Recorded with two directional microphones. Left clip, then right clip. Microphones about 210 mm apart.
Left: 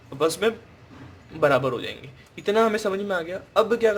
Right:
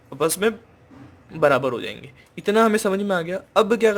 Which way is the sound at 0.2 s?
35° right (ahead or behind).